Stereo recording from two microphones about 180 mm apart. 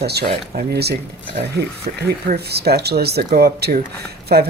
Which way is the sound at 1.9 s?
45° right (ahead or behind).